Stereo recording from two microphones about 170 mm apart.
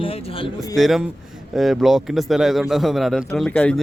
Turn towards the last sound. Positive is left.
turn(degrees=5)  # may be behind; listen again after turning